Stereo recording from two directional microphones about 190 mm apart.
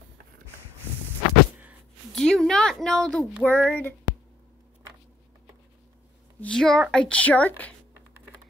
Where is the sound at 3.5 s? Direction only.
10° left (ahead or behind).